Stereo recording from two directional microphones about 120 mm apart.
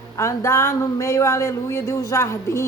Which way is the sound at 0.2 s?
25° left (ahead or behind).